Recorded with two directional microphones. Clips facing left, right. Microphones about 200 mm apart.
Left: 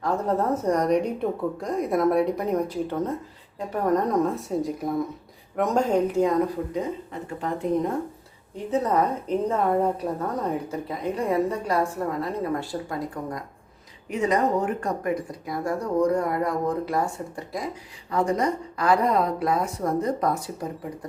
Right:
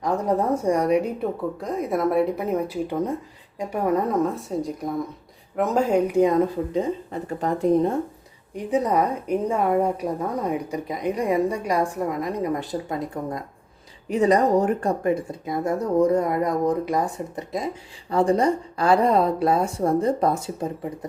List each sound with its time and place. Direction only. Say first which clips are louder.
0.0 s a woman's voice: right 2 dB; 15° right (ahead or behind)
6.7 s speech: right 4 dB; 35° right (ahead or behind)
8.5 s a woman's voice: right 2 dB; 15° right (ahead or behind)
14.1 s speech: right 4 dB; 35° right (ahead or behind)